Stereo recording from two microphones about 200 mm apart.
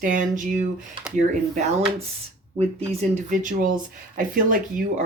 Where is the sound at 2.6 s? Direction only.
35° right (ahead or behind).